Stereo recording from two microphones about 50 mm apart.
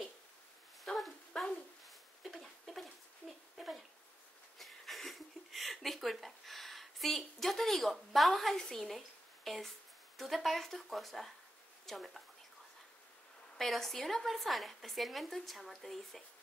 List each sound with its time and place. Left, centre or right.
0.8 s a sound: centre
8.6 s speech: centre
13.6 s speech: centre